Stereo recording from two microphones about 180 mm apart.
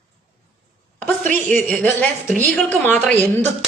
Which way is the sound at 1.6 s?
10° left (ahead or behind).